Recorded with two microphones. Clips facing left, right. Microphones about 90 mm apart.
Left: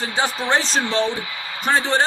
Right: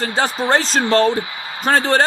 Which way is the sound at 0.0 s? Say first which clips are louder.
Right 4 dB; 35° right (ahead or behind).